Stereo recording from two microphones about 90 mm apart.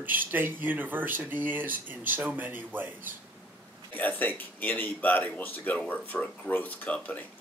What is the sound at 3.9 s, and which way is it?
Speech, 20° left (ahead or behind).